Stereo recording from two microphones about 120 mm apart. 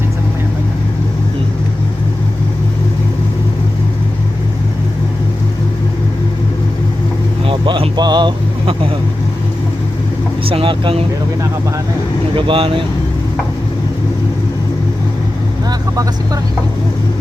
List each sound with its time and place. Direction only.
7.4 s a sound: 45° right (ahead or behind)
10.5 s speech: 45° right (ahead or behind)
12.4 s speech: 45° right (ahead or behind)